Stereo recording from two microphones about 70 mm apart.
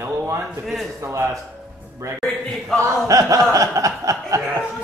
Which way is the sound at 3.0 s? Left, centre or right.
Right.